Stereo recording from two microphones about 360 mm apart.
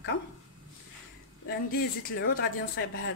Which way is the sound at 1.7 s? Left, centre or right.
Left.